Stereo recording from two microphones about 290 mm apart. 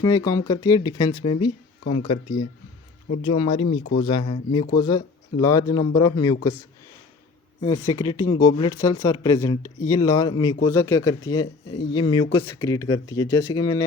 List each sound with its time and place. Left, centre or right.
0.0 s speech: centre
7.6 s speech: centre